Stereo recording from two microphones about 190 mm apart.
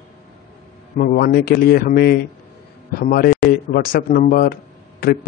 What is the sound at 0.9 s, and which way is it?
A man's voice, 50° left (ahead or behind).